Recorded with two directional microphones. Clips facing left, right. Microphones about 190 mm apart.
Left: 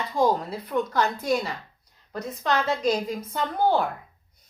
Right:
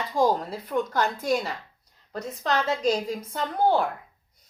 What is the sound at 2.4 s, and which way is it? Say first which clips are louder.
Speech: even; 35° right (ahead or behind).